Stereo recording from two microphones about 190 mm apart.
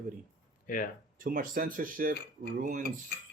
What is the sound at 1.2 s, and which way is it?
Speech, 45° right (ahead or behind).